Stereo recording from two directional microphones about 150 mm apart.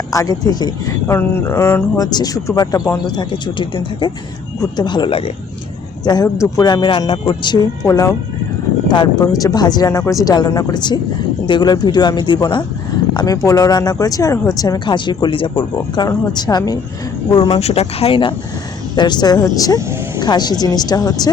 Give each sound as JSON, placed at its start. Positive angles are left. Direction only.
{"t": 0.1, "sound": "speech", "side_deg": 25}
{"t": 6.1, "sound": "speech", "side_deg": 25}
{"t": 7.9, "sound": "speech", "side_deg": 20}